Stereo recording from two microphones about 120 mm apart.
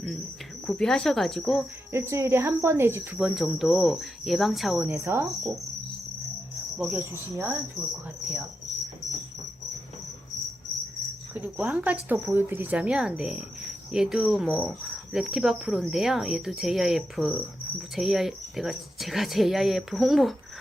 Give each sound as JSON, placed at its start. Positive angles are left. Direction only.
{"t": 0.7, "sound": "speech", "side_deg": 5}
{"t": 1.9, "sound": "cricket", "side_deg": -25}
{"t": 3.2, "sound": "speech", "side_deg": -5}
{"t": 4.8, "sound": "cricket", "side_deg": -15}
{"t": 6.7, "sound": "speech", "side_deg": -10}
{"t": 7.0, "sound": "cricket", "side_deg": -20}
{"t": 11.3, "sound": "speech", "side_deg": -15}